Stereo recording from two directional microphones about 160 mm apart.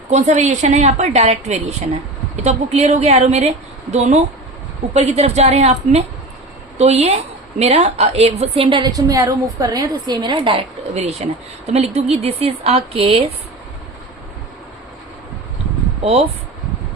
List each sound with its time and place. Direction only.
0.1 s a woman's voice: 45° right (ahead or behind)